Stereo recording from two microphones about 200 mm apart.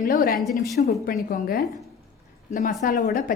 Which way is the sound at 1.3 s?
45° left (ahead or behind).